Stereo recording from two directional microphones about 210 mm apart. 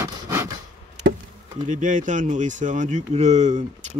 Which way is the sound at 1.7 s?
40° right (ahead or behind).